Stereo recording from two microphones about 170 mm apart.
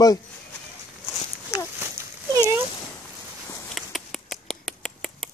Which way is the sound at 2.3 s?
20° right (ahead or behind).